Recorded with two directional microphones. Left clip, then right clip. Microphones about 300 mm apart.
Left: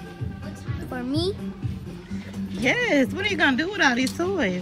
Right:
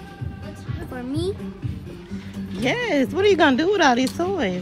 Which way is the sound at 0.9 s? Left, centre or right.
Centre.